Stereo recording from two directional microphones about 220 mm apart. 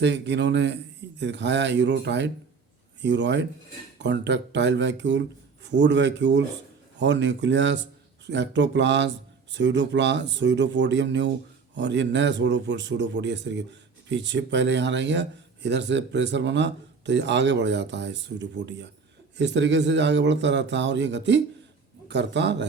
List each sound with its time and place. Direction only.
0.0 s speech: 55° right (ahead or behind)